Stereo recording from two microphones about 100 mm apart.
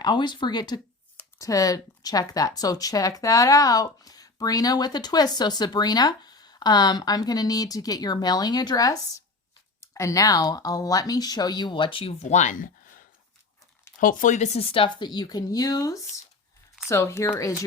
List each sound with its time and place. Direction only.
0.0 s speech: 50° left (ahead or behind)
1.4 s speech: 35° left (ahead or behind); by 12.1 s 60° left (ahead or behind)
14.5 s speech: 75° left (ahead or behind)
14.9 s speech: 45° left (ahead or behind); by 17.5 s 25° left (ahead or behind)